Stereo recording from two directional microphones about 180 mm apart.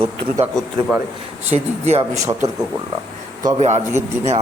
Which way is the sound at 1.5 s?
35° right (ahead or behind).